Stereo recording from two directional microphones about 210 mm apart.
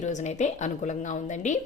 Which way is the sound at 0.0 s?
35° left (ahead or behind).